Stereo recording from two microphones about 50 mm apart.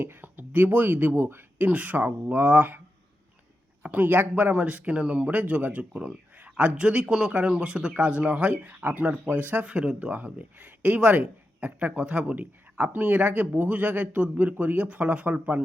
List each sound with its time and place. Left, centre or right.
0.0 s speech: right
1.5 s speech: right
3.8 s speech: right
4.5 s speech: right
9.6 s speech: right
10.0 s speech: right
14.8 s speech: right